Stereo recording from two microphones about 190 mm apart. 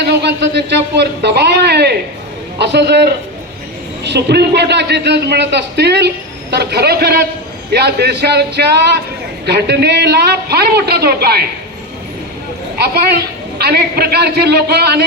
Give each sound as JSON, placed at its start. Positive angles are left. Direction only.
{"t": 0.0, "sound": "a man's voice", "side_deg": -65}
{"t": 13.1, "sound": "a man's voice", "side_deg": -55}